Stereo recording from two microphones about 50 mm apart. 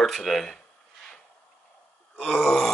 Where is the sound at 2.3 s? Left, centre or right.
Centre.